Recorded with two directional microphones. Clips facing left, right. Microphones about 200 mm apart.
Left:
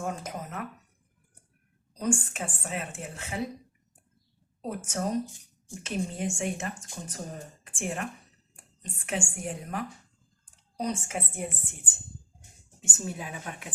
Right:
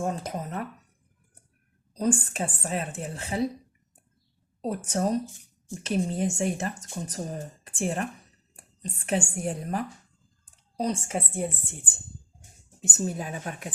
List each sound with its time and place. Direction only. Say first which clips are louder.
0.0 s speech: right 4 dB; 35° right (ahead or behind)
2.0 s a woman's voice: right 3 dB; 35° right (ahead or behind)
4.6 s a woman's voice: right 5 dB; 35° right (ahead or behind)
12.8 s a woman's voice: right 6 dB; 40° right (ahead or behind)